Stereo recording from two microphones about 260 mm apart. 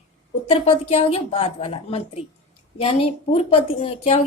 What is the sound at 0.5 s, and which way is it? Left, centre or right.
A woman's voice, left.